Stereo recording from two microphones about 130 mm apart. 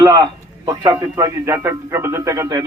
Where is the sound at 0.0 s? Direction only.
30° right (ahead or behind).